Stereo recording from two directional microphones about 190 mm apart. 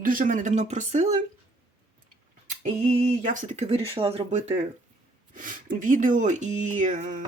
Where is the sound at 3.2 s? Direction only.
45° right (ahead or behind).